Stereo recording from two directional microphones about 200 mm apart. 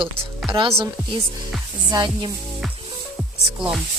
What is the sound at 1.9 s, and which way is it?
Music, 20° right (ahead or behind).